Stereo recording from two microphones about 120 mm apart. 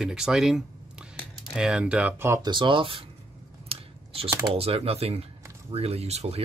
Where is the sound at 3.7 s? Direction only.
55° right (ahead or behind).